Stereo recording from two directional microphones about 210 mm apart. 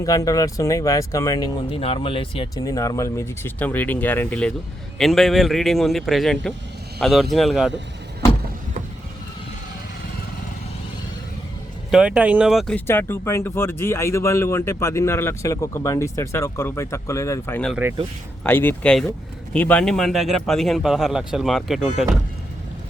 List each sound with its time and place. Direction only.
0.0 s a man's voice: 15° left (ahead or behind); by 7.7 s centre (ahead or behind)
11.9 s speech: 5° right (ahead or behind)
17.7 s speech: 10° right (ahead or behind)
18.4 s a man's voice: 10° left (ahead or behind)